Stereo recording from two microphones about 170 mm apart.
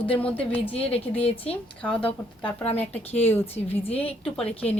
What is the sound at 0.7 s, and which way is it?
Speech, 35° left (ahead or behind).